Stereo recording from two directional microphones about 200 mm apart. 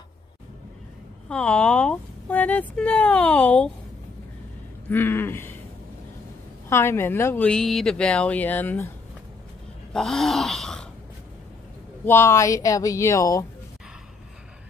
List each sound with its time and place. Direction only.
1.3 s speech: 5° left (ahead or behind)
4.8 s a sound: 10° left (ahead or behind)
6.7 s speech: 10° left (ahead or behind)
9.9 s groan: centre (ahead or behind)
12.0 s speech: 10° left (ahead or behind)